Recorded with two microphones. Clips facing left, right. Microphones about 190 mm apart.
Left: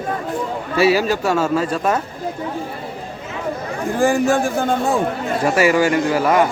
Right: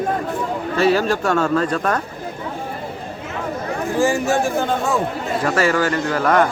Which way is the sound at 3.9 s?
55° left (ahead or behind).